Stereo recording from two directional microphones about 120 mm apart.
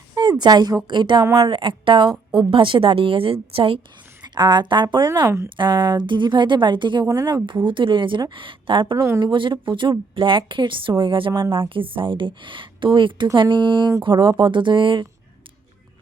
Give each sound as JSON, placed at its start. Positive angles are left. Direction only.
{"t": 0.1, "sound": "speech", "side_deg": -35}
{"t": 1.2, "sound": "speech", "side_deg": -25}
{"t": 1.5, "sound": "speech", "side_deg": -45}
{"t": 4.2, "sound": "speech", "side_deg": -35}
{"t": 9.0, "sound": "speech", "side_deg": -25}
{"t": 9.2, "sound": "speech", "side_deg": -45}